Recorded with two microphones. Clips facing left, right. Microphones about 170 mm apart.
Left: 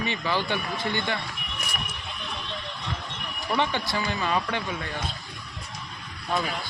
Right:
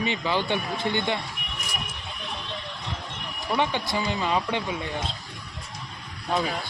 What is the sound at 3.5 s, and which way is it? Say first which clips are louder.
A man's voice: right 1 dB; 15° right (ahead or behind).